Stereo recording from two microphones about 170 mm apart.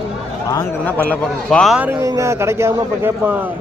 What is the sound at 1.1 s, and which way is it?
Speech, 5° left (ahead or behind).